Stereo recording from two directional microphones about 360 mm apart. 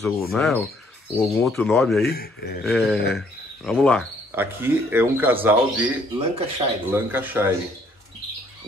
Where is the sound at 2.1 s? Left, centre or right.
Left.